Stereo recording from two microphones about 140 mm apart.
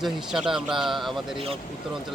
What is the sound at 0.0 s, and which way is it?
Speech, 5° right (ahead or behind).